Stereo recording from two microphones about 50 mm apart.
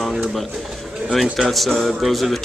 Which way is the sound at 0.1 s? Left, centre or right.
Centre.